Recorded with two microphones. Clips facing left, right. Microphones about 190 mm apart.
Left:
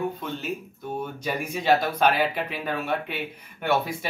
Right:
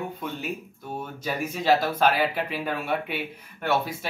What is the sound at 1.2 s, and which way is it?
Speech, centre (ahead or behind).